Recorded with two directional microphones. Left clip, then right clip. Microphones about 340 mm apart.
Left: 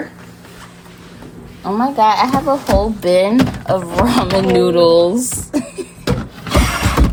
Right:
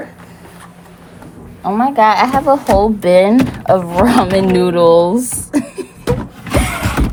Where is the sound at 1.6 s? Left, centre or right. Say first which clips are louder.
Right 2 dB; right.